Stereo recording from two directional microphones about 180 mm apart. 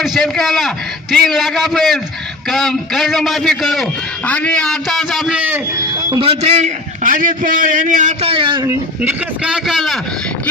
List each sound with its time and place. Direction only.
0.0 s a man's voice: centre (ahead or behind)
6.1 s a man's voice: 30° right (ahead or behind)
9.0 s a man's voice: 5° right (ahead or behind)